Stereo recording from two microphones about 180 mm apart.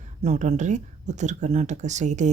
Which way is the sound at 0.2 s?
40° right (ahead or behind).